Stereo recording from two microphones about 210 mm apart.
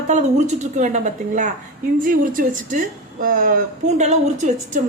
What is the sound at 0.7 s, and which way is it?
A woman's voice, 35° right (ahead or behind).